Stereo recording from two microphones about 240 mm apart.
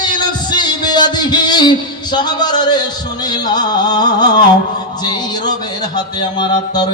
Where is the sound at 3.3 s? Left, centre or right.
Centre.